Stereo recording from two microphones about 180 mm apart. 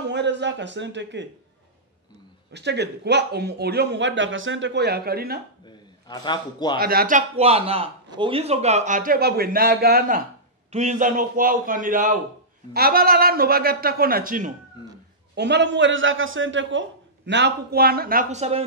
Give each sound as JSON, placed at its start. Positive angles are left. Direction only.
{"t": 0.1, "sound": "speech", "side_deg": -75}
{"t": 2.5, "sound": "speech", "side_deg": -70}
{"t": 5.7, "sound": "a man's voice", "side_deg": 25}
{"t": 6.8, "sound": "a man's voice", "side_deg": -55}
{"t": 10.7, "sound": "a man's voice", "side_deg": -40}
{"t": 15.3, "sound": "a man's voice", "side_deg": -70}
{"t": 17.3, "sound": "a man's voice", "side_deg": -65}